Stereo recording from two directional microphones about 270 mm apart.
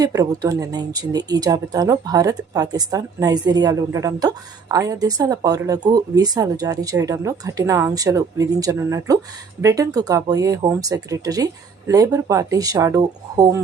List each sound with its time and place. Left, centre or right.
0.0 s speech: centre